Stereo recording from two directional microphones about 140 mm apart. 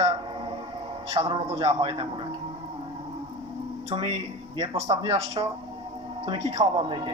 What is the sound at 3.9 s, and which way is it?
A man's voice, 40° right (ahead or behind).